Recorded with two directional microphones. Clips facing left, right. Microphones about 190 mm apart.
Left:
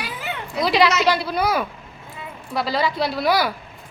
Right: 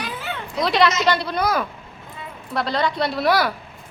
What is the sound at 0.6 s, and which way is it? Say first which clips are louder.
A woman's voice: left 1 dB; centre (ahead or behind).